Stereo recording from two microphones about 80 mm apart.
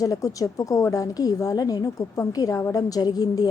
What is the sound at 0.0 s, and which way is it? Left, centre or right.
A woman's voice, left.